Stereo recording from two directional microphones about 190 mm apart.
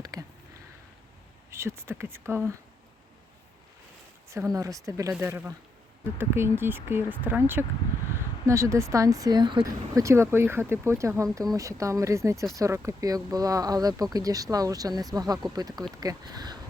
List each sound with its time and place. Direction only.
0.0 s a sound: 20° right (ahead or behind)
1.5 s speech: 15° right (ahead or behind)
4.3 s speech: 15° right (ahead or behind)